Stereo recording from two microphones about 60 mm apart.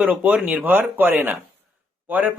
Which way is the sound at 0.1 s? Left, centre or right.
Right.